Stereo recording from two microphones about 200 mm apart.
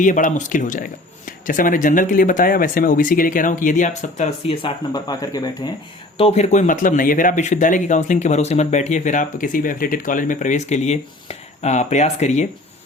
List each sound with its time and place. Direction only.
0.0 s speech: 40° left (ahead or behind); by 5.7 s 20° left (ahead or behind)
6.1 s speech: 30° left (ahead or behind)